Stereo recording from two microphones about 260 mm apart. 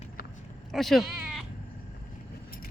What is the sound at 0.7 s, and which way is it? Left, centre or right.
Sheep, centre.